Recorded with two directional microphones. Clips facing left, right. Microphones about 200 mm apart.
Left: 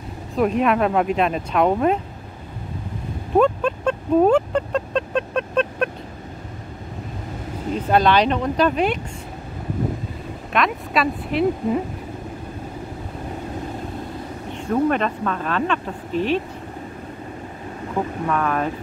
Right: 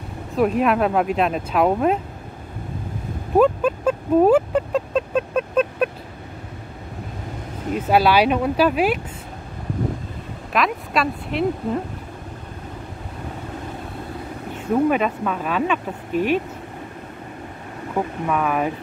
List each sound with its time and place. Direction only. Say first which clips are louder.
0.4 s speech: even; centre (ahead or behind)
3.3 s vehicle: right 1 dB; 5° right (ahead or behind)
7.7 s speech: right 1 dB; 5° right (ahead or behind)
10.5 s speech: even; centre (ahead or behind)
14.9 s speech: right 1 dB; 5° right (ahead or behind)
18.2 s speech: right 1 dB; 5° right (ahead or behind)